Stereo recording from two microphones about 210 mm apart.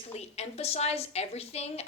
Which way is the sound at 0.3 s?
30° left (ahead or behind).